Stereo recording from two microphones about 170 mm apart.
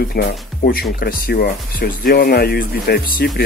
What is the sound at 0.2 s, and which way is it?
Speech, 60° left (ahead or behind).